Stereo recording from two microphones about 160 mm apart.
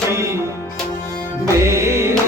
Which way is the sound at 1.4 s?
15° right (ahead or behind).